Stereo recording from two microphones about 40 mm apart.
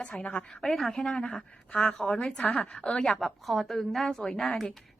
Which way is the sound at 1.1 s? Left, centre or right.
Left.